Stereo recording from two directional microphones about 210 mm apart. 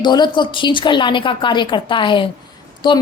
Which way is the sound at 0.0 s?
20° left (ahead or behind).